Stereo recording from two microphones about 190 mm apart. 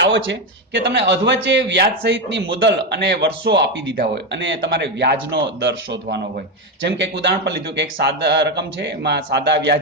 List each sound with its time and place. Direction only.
0.0 s a man's voice: 70° right (ahead or behind)